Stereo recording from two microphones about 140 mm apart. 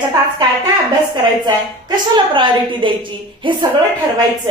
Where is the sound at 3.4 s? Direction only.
35° right (ahead or behind).